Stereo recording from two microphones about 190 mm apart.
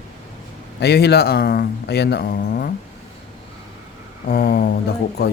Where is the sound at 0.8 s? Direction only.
60° left (ahead or behind).